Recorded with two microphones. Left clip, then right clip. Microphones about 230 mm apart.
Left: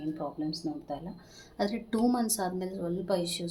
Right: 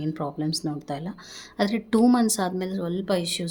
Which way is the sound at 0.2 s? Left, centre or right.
Right.